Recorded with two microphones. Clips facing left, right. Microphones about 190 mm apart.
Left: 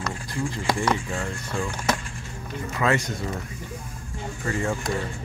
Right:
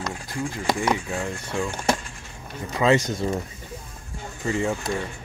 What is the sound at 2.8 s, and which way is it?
Speech, 20° right (ahead or behind).